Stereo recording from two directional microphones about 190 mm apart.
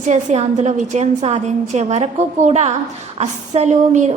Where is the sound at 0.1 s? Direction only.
40° right (ahead or behind).